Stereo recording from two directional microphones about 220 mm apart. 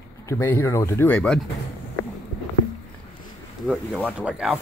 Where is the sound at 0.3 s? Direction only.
10° left (ahead or behind).